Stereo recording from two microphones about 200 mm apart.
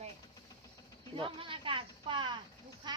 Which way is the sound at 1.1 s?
25° right (ahead or behind).